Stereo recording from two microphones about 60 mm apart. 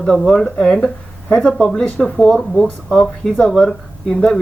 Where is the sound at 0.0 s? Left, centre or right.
Centre.